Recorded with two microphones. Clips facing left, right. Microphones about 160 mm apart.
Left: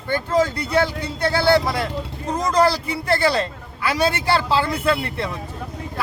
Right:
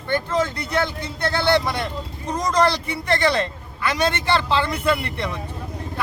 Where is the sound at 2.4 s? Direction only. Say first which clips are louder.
Left 1 dB; 30° left (ahead or behind).